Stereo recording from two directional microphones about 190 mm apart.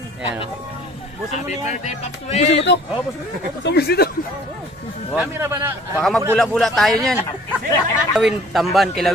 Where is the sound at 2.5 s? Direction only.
65° left (ahead or behind).